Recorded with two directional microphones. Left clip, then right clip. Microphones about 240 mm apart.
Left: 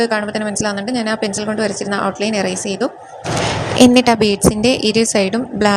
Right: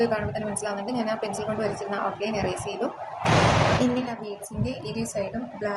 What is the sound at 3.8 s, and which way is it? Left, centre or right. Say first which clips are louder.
A woman's voice: left 16 dB; left.